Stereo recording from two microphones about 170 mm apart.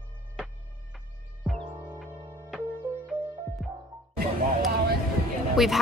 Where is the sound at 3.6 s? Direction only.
Centre (ahead or behind).